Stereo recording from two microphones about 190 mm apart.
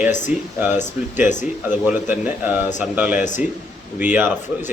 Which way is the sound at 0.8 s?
40° left (ahead or behind).